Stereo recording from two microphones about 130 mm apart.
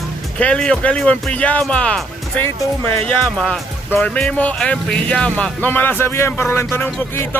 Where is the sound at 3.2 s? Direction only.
5° left (ahead or behind).